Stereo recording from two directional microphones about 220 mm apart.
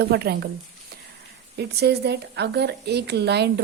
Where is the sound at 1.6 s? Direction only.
50° right (ahead or behind).